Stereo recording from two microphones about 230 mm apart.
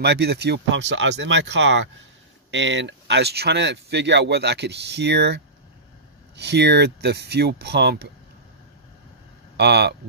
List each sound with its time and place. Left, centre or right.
0.0 s speech: right
9.6 s speech: right